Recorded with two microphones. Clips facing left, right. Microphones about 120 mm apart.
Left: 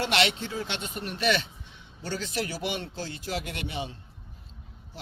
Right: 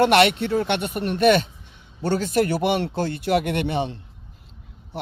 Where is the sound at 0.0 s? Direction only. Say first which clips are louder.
Right 10 dB; 55° right (ahead or behind).